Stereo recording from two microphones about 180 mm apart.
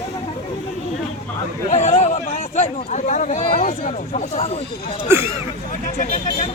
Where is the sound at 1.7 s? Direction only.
40° left (ahead or behind).